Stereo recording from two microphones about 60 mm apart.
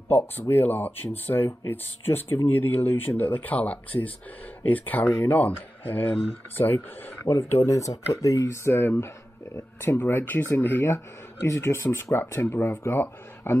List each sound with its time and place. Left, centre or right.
0.1 s speech: left
7.2 s speech: left
8.5 s speech: left
11.4 s speech: left